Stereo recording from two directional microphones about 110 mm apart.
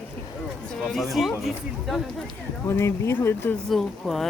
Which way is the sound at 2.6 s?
25° left (ahead or behind).